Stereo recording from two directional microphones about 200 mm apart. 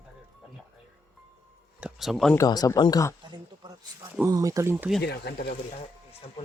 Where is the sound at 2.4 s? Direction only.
15° left (ahead or behind).